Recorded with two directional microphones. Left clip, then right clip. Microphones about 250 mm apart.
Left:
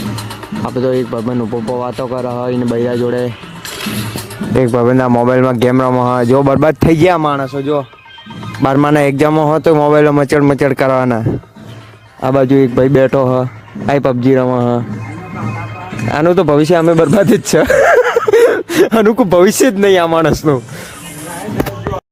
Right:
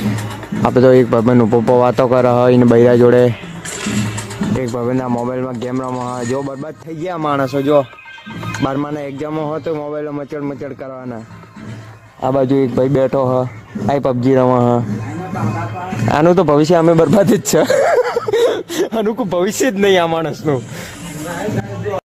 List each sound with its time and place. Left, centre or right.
0.6 s speech: centre
4.5 s speech: left
6.5 s a man's voice: left
7.4 s speech: centre
8.6 s a man's voice: left
12.2 s speech: centre
16.0 s speech: centre; by 20.5 s left